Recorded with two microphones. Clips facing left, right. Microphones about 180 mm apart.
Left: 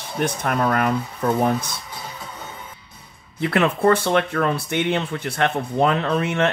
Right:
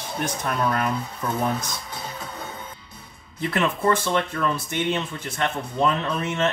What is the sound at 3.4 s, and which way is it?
Speech, 60° left (ahead or behind).